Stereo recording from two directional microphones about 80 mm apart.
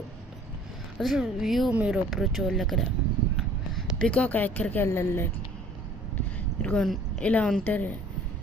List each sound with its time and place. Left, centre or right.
0.9 s a woman's voice: centre
1.7 s speech: centre
2.0 s a woman's voice: centre
3.9 s a woman's voice: centre; by 5.3 s left
6.1 s a sound: centre
7.2 s a woman's voice: centre